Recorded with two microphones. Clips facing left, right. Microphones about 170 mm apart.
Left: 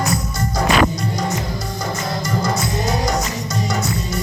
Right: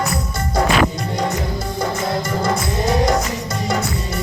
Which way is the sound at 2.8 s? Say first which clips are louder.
Right 6 dB; 55° right (ahead or behind).